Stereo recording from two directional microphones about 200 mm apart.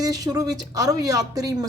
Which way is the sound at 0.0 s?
20° right (ahead or behind).